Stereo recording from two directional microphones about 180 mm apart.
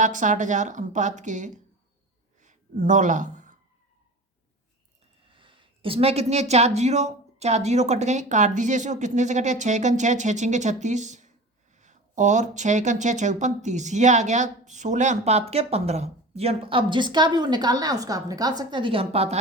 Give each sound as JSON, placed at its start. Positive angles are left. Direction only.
{"t": 0.0, "sound": "a woman's voice", "side_deg": -45}
{"t": 2.4, "sound": "a sound", "side_deg": -45}
{"t": 5.3, "sound": "speech", "side_deg": -30}